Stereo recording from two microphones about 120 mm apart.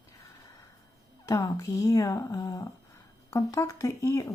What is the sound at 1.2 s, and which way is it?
Speech, 30° left (ahead or behind).